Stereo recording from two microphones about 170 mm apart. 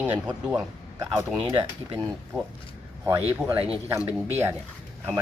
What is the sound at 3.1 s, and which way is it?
Speech, 10° right (ahead or behind).